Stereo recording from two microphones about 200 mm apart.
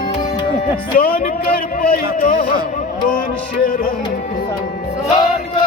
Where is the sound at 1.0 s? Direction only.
45° left (ahead or behind).